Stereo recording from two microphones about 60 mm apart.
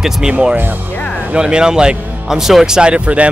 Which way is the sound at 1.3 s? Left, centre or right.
Centre.